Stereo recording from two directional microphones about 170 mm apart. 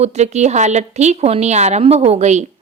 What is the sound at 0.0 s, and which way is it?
A woman's voice, 40° right (ahead or behind).